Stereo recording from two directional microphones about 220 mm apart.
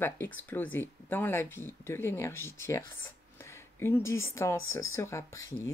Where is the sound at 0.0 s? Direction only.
10° left (ahead or behind).